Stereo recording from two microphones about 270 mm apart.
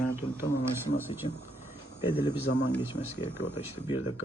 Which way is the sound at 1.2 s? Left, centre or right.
Left.